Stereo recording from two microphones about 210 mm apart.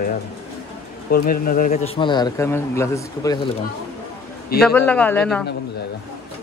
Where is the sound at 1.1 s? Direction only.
40° left (ahead or behind).